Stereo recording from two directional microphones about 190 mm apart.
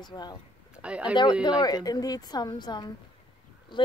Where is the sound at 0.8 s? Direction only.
5° right (ahead or behind).